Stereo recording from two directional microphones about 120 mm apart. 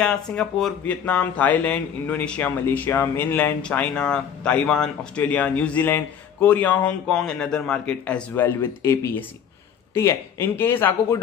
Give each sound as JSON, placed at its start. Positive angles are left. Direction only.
{"t": 0.0, "sound": "speech", "side_deg": 5}
{"t": 9.9, "sound": "speech", "side_deg": 20}